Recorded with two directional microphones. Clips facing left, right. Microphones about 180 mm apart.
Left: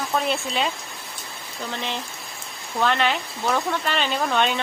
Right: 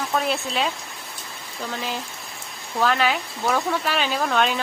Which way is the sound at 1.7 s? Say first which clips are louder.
Even; 5° right (ahead or behind).